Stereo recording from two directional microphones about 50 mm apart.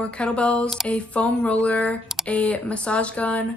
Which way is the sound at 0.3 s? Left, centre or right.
Left.